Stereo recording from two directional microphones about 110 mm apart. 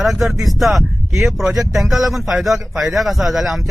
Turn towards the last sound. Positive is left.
turn(degrees=0)  # may be behind; listen again after turning